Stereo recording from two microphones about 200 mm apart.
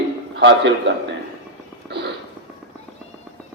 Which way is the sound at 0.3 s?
65° right (ahead or behind).